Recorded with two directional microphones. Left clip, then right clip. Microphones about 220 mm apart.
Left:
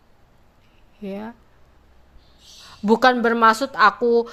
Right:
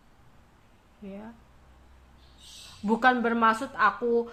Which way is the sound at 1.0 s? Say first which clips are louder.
Left 11 dB; 50° left (ahead or behind).